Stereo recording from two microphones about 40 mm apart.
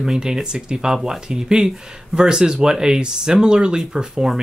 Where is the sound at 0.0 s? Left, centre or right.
Centre.